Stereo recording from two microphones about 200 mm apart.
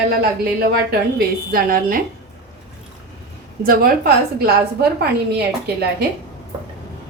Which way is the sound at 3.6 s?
45° right (ahead or behind).